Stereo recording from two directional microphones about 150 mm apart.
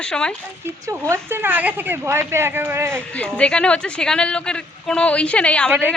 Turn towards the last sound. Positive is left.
turn(degrees=10)  # may be behind; listen again after turning